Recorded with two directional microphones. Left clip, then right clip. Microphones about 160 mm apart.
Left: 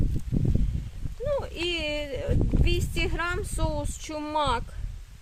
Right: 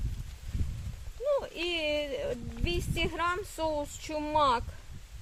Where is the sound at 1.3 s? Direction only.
30° left (ahead or behind).